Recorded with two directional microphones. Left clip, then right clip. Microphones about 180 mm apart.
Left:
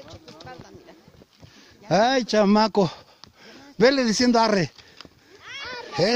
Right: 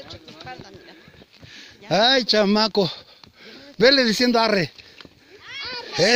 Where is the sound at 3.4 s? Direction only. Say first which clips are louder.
Right 2 dB; 45° left (ahead or behind).